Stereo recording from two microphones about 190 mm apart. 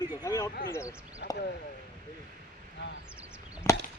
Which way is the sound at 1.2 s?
65° left (ahead or behind).